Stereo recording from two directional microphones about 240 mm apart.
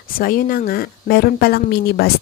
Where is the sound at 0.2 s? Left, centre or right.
Left.